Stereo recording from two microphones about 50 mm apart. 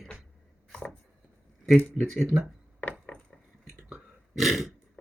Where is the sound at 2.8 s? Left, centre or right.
Left.